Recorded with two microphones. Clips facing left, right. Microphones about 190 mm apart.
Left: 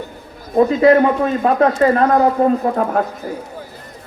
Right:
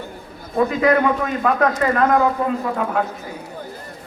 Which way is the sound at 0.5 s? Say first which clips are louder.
Left 6 dB; 25° left (ahead or behind).